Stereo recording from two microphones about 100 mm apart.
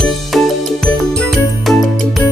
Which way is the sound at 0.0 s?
5° left (ahead or behind).